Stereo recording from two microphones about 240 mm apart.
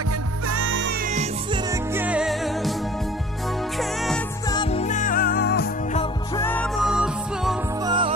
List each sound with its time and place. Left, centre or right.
0.5 s music: right
1.0 s music: right
1.7 s music: centre
3.7 s music: centre
4.5 s music: left
6.3 s music: centre
7.8 s music: centre